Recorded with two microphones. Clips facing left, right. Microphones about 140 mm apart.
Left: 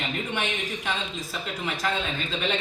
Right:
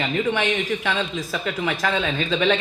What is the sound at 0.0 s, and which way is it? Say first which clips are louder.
Speech: right 8 dB; 90° right.